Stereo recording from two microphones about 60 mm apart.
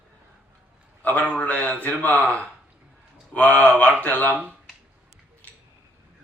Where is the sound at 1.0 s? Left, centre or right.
Left.